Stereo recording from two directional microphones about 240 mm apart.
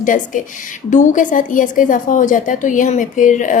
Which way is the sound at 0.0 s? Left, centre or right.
Left.